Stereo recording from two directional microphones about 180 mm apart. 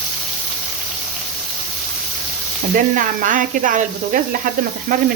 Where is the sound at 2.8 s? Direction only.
45° right (ahead or behind).